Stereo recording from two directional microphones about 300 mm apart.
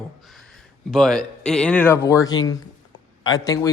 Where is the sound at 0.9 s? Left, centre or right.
Centre.